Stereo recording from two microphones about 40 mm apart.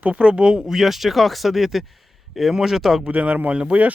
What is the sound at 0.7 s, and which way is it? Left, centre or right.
Speech, centre.